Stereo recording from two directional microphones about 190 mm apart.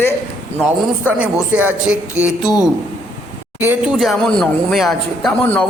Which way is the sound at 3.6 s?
10° right (ahead or behind).